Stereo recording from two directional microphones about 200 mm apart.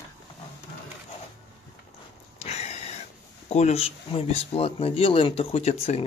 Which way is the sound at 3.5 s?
30° left (ahead or behind).